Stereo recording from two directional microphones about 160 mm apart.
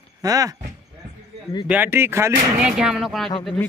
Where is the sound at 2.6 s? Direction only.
5° right (ahead or behind).